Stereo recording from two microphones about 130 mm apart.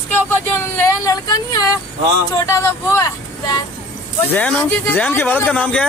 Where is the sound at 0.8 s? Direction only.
25° left (ahead or behind).